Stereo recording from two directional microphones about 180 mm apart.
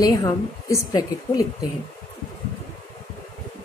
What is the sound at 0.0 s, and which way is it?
A woman's voice, 20° left (ahead or behind).